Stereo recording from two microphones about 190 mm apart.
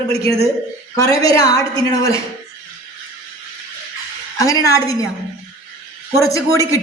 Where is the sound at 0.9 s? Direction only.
15° left (ahead or behind).